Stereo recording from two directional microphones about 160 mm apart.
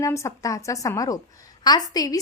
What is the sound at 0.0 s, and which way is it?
A woman's voice, 15° left (ahead or behind).